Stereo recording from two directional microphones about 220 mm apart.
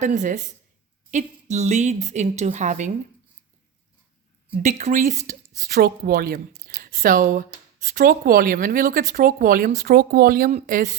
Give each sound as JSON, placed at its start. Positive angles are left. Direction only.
{"t": 0.0, "sound": "speech", "side_deg": -35}
{"t": 4.5, "sound": "speech", "side_deg": -35}